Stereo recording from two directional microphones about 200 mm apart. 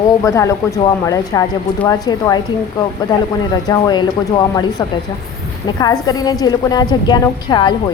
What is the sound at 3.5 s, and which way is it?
Speech, 20° left (ahead or behind).